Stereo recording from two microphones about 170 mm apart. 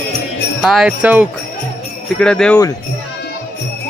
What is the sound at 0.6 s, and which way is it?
Speech, centre (ahead or behind).